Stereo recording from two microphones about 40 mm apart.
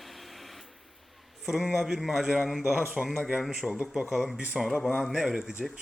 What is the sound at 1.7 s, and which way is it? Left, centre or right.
Speech, centre.